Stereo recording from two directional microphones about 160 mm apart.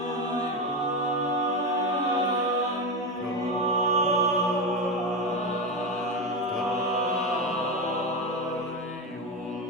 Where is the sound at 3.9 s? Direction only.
45° right (ahead or behind).